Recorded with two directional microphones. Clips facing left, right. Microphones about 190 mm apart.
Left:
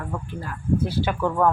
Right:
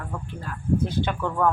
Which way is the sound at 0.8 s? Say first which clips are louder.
Left 3 dB; 10° left (ahead or behind).